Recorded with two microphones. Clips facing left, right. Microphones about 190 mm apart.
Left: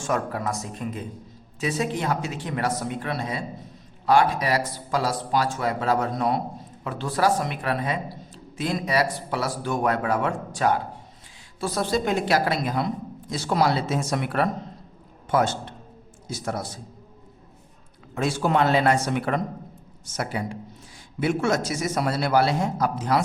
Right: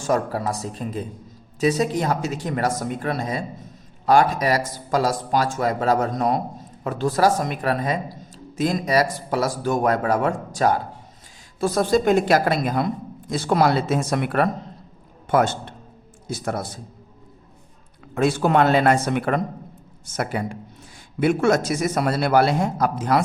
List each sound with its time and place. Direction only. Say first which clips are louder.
0.0 s a man's voice: right 4 dB; 35° right (ahead or behind); by 16.6 s 55° right (ahead or behind)
18.1 s a man's voice: right 4 dB; 55° right (ahead or behind)